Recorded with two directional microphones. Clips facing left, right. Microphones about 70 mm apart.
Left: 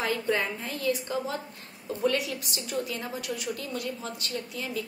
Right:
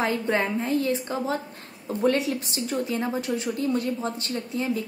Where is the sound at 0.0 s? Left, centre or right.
Right.